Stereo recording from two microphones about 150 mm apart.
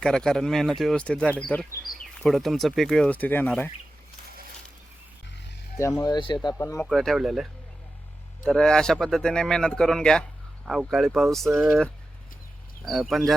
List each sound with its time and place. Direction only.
0.0 s speech: 5° left (ahead or behind)
5.8 s speech: 25° left (ahead or behind)
6.5 s speech: 20° left (ahead or behind)
6.8 s speech: centre (ahead or behind)
8.4 s speech: 5° left (ahead or behind)